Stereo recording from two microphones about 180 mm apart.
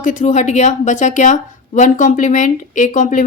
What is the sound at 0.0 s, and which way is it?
A woman's voice, 45° left (ahead or behind).